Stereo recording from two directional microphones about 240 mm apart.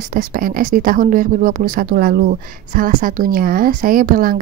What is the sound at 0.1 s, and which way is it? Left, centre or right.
Speech, right.